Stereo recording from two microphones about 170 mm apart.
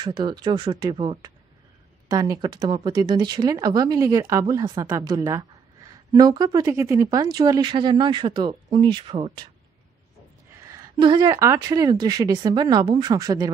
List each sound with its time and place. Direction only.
0.0 s speech: 25° right (ahead or behind)
10.7 s speech: 25° right (ahead or behind)